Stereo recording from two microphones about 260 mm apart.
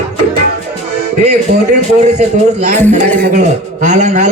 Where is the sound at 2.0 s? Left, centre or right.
Right.